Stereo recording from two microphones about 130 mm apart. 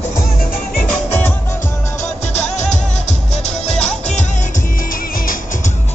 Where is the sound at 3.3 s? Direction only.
55° left (ahead or behind).